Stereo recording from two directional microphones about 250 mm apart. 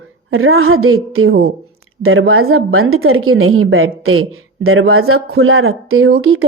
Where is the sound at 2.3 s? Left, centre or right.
Right.